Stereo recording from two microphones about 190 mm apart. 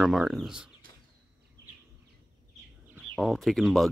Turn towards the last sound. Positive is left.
turn(degrees=0)  # may be behind; listen again after turning